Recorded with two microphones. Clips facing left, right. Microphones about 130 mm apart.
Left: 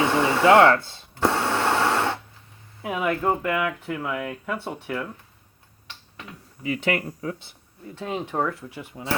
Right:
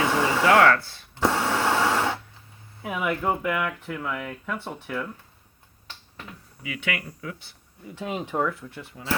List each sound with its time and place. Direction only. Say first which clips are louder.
0.0 s a sound: left 2 dB; 20° left (ahead or behind)
0.4 s speech: left 4 dB; 20° left (ahead or behind)
1.2 s a sound: left 1 dB; 5° right (ahead or behind)
2.8 s speech: left 2 dB; centre (ahead or behind)
6.6 s speech: left 7 dB; 40° left (ahead or behind)
7.9 s speech: even; 5° right (ahead or behind)
8.1 s speech: left 1 dB; 20° left (ahead or behind)